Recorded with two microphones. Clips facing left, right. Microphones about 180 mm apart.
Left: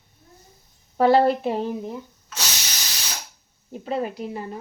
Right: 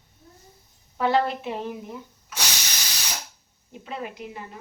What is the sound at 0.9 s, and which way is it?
Speech, 35° left (ahead or behind).